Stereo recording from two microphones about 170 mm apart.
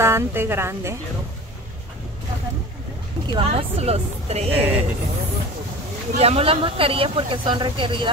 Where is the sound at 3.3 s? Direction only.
35° right (ahead or behind).